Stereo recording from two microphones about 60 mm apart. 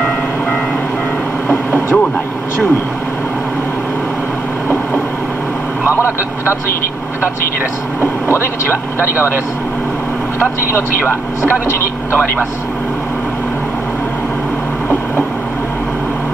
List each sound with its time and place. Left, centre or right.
1.5 s vehicle: left
5.9 s speech: left
8.0 s speech: left
10.4 s speech: left